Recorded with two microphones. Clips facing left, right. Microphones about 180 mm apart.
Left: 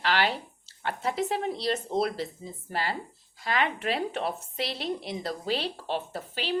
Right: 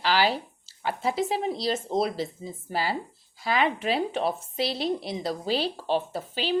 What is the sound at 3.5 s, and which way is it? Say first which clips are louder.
A woman's voice: right 3 dB; 30° right (ahead or behind).